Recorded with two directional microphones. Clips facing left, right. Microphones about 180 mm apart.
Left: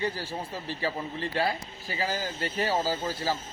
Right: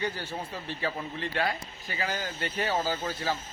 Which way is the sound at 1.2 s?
30° left (ahead or behind).